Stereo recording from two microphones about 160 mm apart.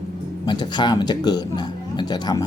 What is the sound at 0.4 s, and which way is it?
Speech, 25° left (ahead or behind).